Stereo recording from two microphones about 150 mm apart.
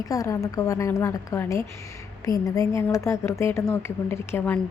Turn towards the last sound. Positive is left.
turn(degrees=15)  # may be behind; listen again after turning